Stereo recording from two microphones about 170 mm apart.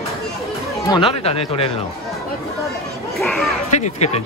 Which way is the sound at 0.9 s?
30° left (ahead or behind).